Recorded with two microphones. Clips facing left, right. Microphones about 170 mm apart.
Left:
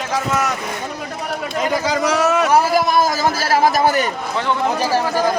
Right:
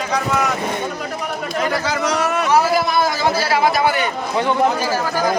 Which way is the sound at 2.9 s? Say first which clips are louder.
Left 1 dB; 45° left (ahead or behind).